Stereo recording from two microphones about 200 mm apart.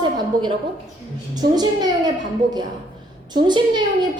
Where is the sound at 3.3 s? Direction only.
20° right (ahead or behind).